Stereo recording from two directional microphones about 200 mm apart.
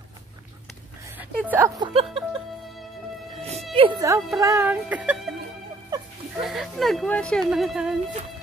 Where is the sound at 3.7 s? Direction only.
25° right (ahead or behind).